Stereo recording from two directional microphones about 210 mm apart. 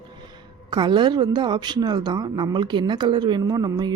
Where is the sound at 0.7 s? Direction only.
20° right (ahead or behind).